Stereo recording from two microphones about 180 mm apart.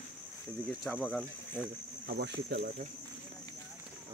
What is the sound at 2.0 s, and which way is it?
Speech, 60° right (ahead or behind).